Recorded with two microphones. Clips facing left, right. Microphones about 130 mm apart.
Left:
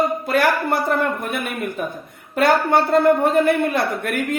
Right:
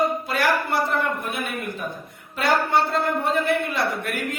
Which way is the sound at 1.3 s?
60° left (ahead or behind).